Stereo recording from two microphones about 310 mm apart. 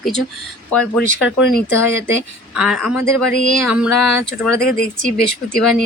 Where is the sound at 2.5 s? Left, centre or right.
Centre.